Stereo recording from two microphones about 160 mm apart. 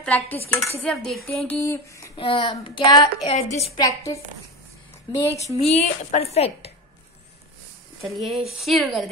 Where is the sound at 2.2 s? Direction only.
35° left (ahead or behind).